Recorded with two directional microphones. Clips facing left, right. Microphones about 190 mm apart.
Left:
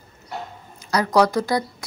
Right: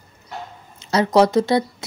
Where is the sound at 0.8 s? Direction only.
25° right (ahead or behind).